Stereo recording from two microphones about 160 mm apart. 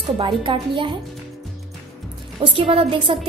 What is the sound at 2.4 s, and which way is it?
Speech, 30° right (ahead or behind).